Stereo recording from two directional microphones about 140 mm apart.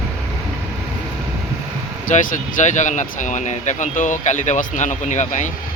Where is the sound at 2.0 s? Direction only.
70° left (ahead or behind).